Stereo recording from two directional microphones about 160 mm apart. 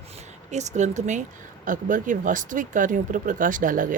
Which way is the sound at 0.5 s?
45° right (ahead or behind).